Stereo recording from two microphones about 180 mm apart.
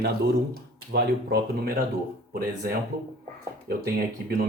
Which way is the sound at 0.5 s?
60° right (ahead or behind).